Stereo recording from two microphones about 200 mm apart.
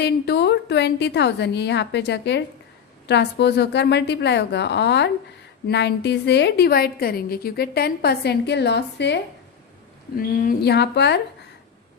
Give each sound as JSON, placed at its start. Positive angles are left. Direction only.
{"t": 0.0, "sound": "a woman's voice", "side_deg": 60}
{"t": 10.2, "sound": "a woman's voice", "side_deg": 45}